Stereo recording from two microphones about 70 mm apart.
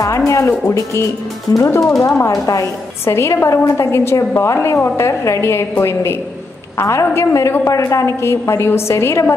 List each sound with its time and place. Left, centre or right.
0.3 s a woman's voice: left